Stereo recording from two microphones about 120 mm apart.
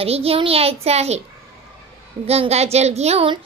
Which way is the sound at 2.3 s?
60° right (ahead or behind).